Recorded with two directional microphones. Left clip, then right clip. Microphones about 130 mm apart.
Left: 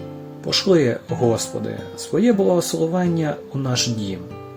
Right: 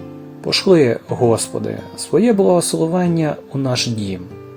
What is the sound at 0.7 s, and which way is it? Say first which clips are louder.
Speech: right 5 dB; 60° right (ahead or behind).